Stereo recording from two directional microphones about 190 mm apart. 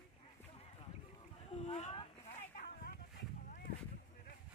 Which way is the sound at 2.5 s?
50° left (ahead or behind).